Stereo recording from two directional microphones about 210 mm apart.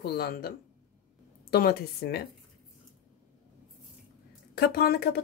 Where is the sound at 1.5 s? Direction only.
45° left (ahead or behind).